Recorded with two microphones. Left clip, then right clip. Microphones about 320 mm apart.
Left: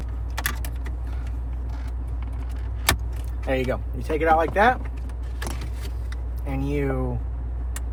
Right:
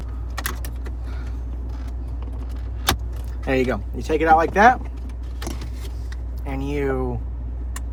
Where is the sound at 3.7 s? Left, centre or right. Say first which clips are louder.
Right 4 dB; right.